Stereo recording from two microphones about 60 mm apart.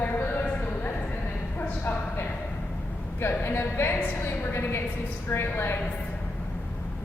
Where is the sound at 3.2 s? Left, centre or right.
Left.